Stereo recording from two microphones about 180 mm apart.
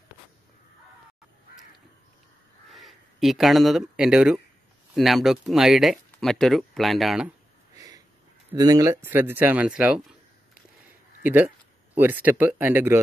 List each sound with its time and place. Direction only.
2.7 s speech: centre (ahead or behind)
7.7 s sniff: 20° right (ahead or behind)
8.5 s speech: 20° right (ahead or behind)